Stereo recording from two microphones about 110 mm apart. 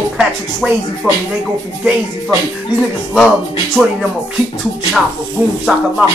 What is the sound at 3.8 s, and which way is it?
Speech, 5° right (ahead or behind).